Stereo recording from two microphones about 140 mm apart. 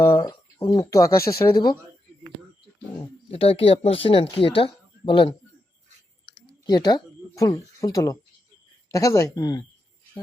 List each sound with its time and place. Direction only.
0.2 s speech: 30° left (ahead or behind)
3.2 s speech: 45° left (ahead or behind)
6.4 s speech: 30° left (ahead or behind)